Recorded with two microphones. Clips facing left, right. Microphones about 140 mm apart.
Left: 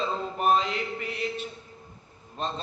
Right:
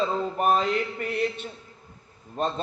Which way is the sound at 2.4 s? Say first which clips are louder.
Right 5 dB; 50° right (ahead or behind).